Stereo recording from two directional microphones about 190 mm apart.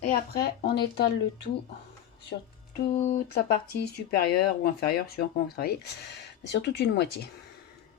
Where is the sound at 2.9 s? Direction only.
35° left (ahead or behind).